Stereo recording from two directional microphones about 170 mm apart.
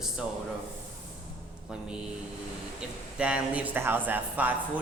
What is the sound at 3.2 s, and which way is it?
Speech, 5° right (ahead or behind).